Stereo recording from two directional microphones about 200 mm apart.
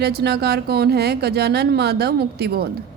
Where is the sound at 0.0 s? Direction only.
55° right (ahead or behind).